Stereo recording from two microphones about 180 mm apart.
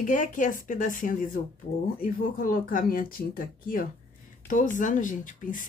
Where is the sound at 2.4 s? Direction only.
50° left (ahead or behind).